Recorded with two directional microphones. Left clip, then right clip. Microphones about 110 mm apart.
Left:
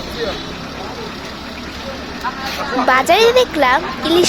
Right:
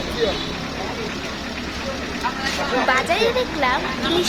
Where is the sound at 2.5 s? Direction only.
70° left (ahead or behind).